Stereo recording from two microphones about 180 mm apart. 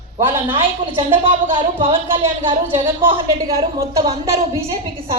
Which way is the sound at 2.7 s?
15° right (ahead or behind).